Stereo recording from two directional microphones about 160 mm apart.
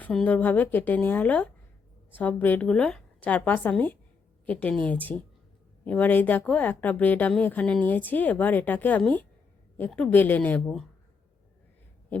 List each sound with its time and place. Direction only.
0.0 s a woman's voice: 5° left (ahead or behind)